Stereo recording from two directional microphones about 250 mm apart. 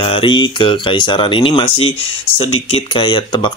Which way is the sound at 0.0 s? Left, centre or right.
Centre.